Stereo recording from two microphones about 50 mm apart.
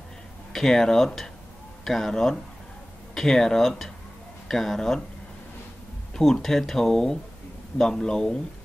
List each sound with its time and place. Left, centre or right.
0.5 s speech: centre
6.1 s speech: centre